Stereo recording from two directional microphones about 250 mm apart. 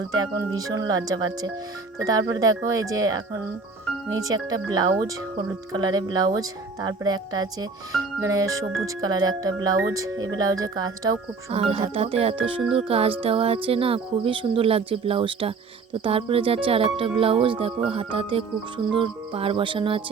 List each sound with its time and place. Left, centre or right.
0.2 s speech: centre